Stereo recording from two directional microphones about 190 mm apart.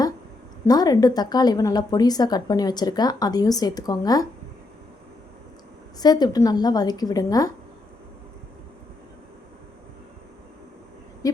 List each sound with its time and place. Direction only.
0.6 s a woman's voice: 20° left (ahead or behind)
6.0 s a woman's voice: 20° left (ahead or behind)